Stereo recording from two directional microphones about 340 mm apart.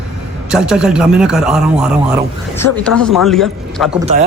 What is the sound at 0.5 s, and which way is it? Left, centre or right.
Speech, centre.